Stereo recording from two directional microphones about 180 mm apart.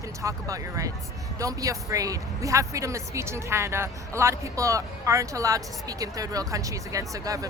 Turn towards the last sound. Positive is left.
turn(degrees=-20)  # may be behind; listen again after turning